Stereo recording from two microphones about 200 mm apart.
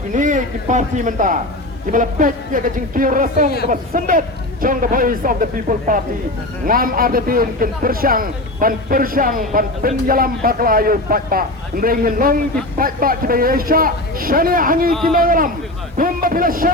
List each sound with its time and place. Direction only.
0.1 s a man's voice: 40° right (ahead or behind)